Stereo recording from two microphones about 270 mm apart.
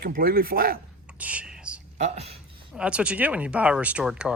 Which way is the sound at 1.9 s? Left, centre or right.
Right.